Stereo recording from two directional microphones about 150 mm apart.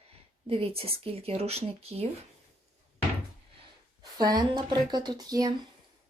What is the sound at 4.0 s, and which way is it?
Speech, 25° right (ahead or behind).